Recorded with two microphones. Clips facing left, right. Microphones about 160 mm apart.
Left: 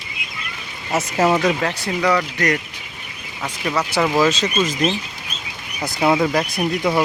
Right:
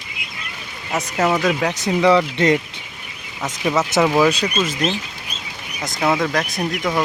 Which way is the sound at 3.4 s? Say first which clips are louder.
Right 3 dB; 5° right (ahead or behind).